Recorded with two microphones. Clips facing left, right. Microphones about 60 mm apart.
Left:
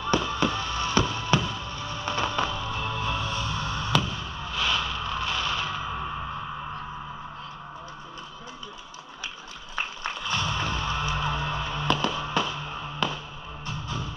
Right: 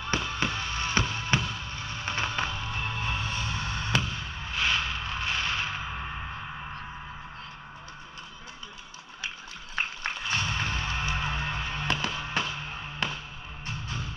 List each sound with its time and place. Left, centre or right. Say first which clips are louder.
0.0 s music: left 5 dB; right
10.3 s music: left 3 dB; right